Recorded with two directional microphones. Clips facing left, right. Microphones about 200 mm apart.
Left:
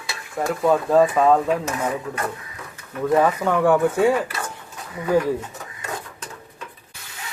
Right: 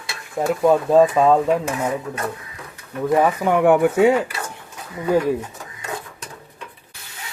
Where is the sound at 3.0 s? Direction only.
15° right (ahead or behind).